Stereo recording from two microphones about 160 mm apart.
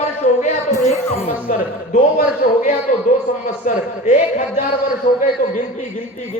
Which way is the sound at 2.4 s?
50° left (ahead or behind).